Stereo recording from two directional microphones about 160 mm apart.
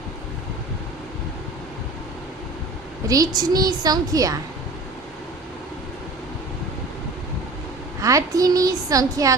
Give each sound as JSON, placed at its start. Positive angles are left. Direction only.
{"t": 3.1, "sound": "a woman's voice", "side_deg": -25}
{"t": 8.0, "sound": "a woman's voice", "side_deg": -20}